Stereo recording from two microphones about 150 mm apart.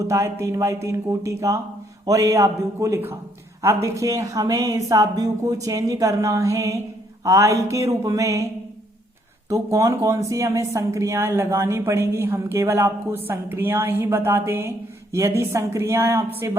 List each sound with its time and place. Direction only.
0.0 s a woman's voice: 20° right (ahead or behind)
9.5 s a woman's voice: 20° right (ahead or behind)